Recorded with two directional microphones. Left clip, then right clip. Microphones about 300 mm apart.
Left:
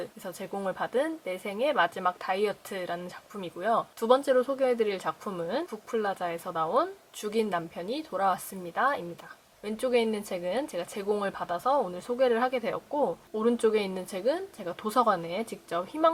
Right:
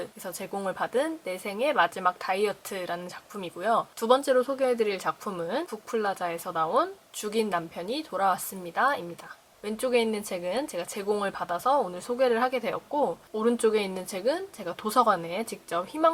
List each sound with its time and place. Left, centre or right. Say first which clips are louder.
0.5 s a woman's voice: right 1 dB; centre
12.9 s speech: right 2 dB; left
13.4 s a woman's voice: right 1 dB; centre